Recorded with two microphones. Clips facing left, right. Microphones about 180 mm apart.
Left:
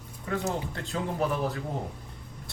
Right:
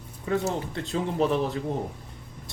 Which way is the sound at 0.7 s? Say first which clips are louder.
Right 4 dB; 25° right (ahead or behind).